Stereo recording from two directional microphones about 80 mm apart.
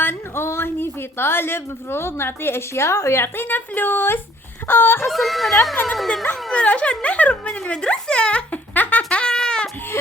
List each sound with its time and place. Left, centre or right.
0.0 s a woman's voice: left
5.1 s speech: centre
6.2 s speech: centre
7.4 s a sound: centre